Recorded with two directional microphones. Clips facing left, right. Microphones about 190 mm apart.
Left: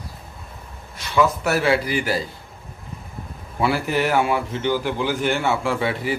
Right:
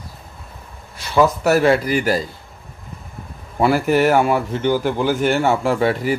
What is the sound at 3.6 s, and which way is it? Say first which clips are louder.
A man's voice: right 6 dB; 45° right (ahead or behind).